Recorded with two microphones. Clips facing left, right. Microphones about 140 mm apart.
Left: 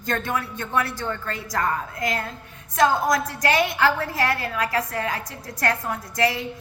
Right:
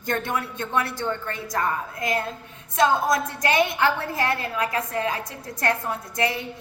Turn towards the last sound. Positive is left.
turn(degrees=-25)  # may be behind; listen again after turning